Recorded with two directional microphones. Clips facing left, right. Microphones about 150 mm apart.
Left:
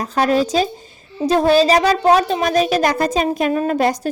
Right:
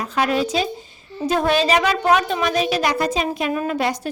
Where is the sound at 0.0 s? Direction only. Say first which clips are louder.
Left 4 dB; 40° left (ahead or behind).